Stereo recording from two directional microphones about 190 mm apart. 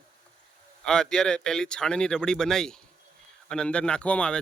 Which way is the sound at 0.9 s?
5° left (ahead or behind).